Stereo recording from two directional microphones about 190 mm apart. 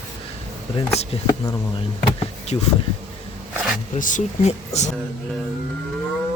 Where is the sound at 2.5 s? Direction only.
30° left (ahead or behind).